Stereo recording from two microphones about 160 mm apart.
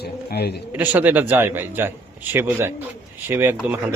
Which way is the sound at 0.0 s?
85° left.